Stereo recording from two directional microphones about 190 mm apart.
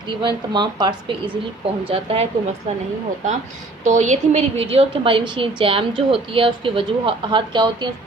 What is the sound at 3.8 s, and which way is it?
A woman's voice, 40° right (ahead or behind).